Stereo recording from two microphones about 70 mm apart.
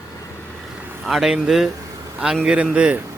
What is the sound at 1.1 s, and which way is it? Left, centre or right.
Speech, centre.